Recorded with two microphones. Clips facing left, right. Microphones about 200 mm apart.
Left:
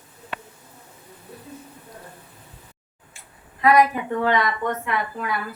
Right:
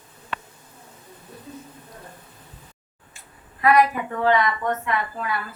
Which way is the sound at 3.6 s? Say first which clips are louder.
Left 1 dB; 25° left (ahead or behind).